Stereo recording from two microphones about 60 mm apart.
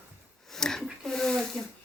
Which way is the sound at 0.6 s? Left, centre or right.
Centre.